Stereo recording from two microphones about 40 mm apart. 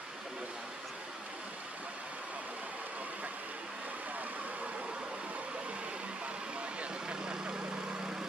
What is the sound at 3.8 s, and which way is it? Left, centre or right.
Vehicle, right.